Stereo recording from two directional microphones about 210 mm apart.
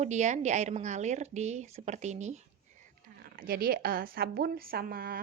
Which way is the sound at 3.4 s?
45° right (ahead or behind).